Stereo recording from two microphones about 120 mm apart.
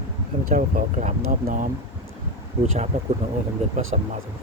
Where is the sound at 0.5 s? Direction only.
90° right.